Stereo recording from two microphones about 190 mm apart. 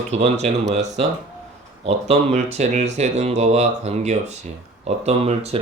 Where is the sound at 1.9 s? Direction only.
35° right (ahead or behind).